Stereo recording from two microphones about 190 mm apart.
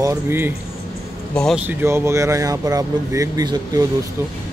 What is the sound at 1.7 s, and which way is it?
Speech, 10° right (ahead or behind).